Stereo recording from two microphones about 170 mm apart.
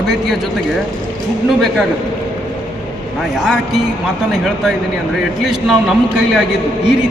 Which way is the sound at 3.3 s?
Centre (ahead or behind).